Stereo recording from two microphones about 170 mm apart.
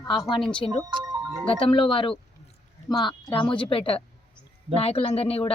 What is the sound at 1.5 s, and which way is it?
A woman's voice, 30° left (ahead or behind).